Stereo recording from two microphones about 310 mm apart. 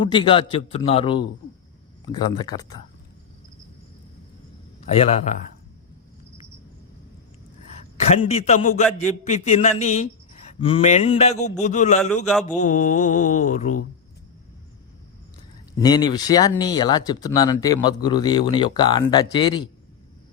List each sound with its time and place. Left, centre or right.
0.0 s speech: centre
4.9 s mantra: centre
8.1 s mantra: centre
15.8 s speech: centre